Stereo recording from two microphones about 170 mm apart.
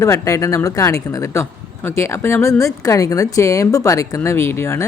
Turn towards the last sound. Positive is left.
turn(degrees=15)  # may be behind; listen again after turning